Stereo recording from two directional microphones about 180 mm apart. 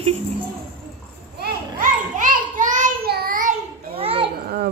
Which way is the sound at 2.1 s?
45° right (ahead or behind).